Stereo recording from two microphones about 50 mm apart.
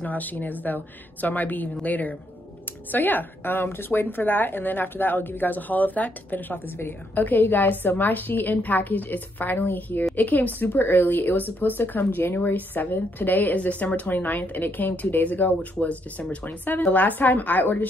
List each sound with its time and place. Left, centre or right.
0.0 s a woman's voice: left
13.6 s a woman's voice: left